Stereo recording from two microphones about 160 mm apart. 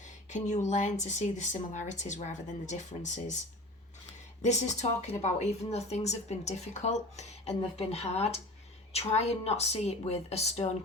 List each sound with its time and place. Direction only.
0.3 s speech: 50° left (ahead or behind)
4.4 s a woman's voice: 45° left (ahead or behind)